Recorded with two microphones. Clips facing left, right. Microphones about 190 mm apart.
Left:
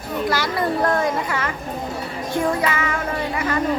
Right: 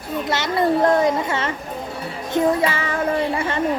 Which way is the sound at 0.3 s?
25° right (ahead or behind).